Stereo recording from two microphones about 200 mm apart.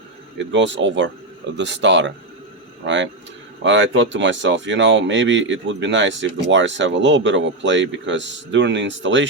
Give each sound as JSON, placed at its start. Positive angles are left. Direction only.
{"t": 0.3, "sound": "speech", "side_deg": -65}